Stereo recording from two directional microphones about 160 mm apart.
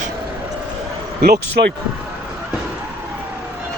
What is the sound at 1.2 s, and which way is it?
Speech, 80° right.